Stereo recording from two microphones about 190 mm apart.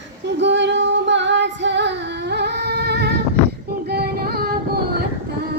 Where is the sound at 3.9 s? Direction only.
55° right (ahead or behind).